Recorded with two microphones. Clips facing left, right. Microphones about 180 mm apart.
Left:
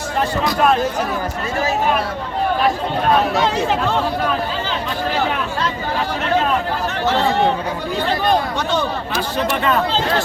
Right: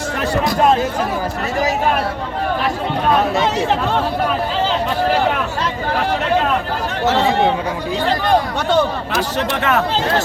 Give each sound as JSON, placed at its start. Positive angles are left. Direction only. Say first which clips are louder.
{"t": 9.5, "sound": "speech", "louder": "even", "side_deg": -75}